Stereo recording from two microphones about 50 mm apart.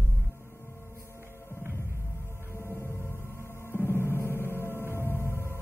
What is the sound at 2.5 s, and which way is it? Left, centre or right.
Music, left.